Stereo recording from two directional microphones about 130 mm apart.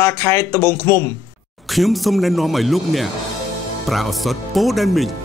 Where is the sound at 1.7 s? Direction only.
Centre (ahead or behind).